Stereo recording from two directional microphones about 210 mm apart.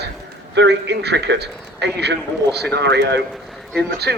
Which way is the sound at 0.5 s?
55° right (ahead or behind).